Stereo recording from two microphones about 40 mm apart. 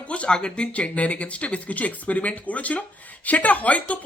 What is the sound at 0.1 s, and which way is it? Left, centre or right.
Speech, left.